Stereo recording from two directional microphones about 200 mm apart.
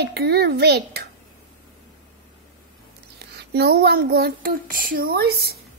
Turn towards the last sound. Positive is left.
turn(degrees=-50)  # may be behind; listen again after turning